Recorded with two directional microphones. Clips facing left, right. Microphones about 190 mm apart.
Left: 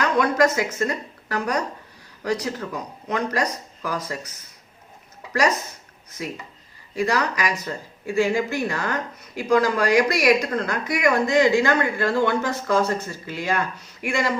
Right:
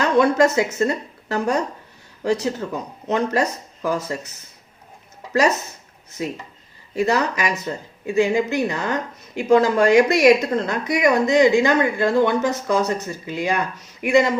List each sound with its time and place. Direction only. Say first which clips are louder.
0.0 s speech: right 3 dB; 30° right (ahead or behind)
6.9 s speech: right 3 dB; 25° right (ahead or behind)